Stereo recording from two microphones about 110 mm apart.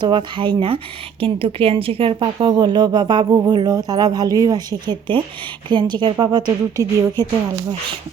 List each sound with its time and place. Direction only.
0.0 s speech: 45° right (ahead or behind)